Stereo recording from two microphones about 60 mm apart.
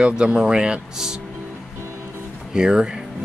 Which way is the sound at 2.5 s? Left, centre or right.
Centre.